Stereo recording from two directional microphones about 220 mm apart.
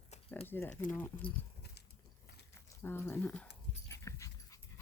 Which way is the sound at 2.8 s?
10° left (ahead or behind).